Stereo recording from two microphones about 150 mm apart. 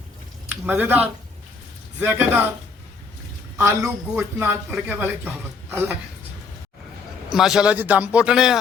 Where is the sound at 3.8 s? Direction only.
10° right (ahead or behind).